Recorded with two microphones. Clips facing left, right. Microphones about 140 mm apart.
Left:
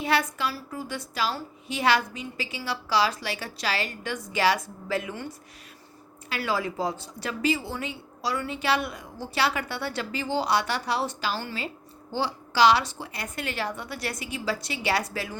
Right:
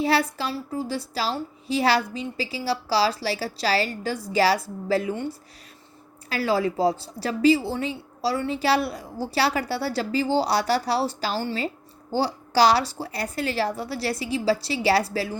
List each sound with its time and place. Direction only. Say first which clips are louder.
0.0 s a woman's voice: right 3 dB; 35° right (ahead or behind)